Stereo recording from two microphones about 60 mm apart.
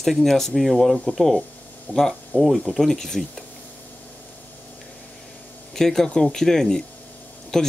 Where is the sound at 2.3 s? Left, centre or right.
Centre.